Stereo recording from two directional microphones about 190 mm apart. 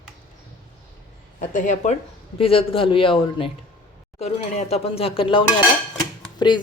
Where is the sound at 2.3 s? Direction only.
30° left (ahead or behind).